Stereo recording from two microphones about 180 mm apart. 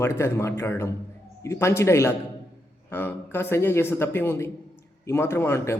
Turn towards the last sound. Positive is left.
turn(degrees=15)  # may be behind; listen again after turning